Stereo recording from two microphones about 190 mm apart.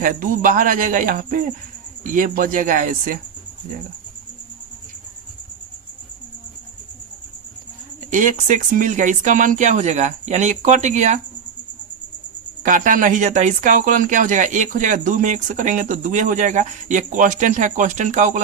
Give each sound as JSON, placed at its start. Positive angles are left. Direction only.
{"t": 0.0, "sound": "speech", "side_deg": -45}
{"t": 8.1, "sound": "speech", "side_deg": -45}
{"t": 12.6, "sound": "speech", "side_deg": -45}